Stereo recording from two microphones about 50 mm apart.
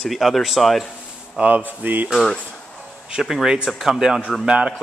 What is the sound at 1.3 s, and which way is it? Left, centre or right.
Speech, right.